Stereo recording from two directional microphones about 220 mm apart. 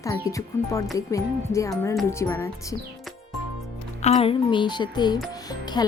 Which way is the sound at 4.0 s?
30° left (ahead or behind).